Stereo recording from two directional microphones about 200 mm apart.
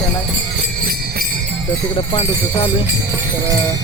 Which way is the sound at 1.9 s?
25° left (ahead or behind).